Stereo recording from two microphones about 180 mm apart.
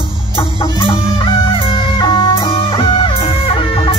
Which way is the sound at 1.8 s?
25° left (ahead or behind).